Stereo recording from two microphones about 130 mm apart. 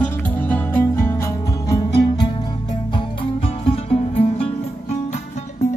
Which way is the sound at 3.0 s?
45° left (ahead or behind).